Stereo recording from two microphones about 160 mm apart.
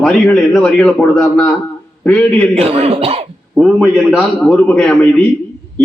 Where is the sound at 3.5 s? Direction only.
5° right (ahead or behind).